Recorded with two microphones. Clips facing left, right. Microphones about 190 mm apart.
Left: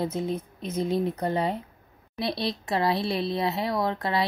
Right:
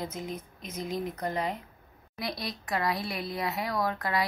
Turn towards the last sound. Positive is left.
turn(degrees=25)  # may be behind; listen again after turning